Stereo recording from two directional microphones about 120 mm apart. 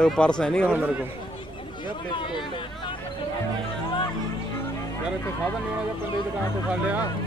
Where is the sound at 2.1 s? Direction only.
40° left (ahead or behind).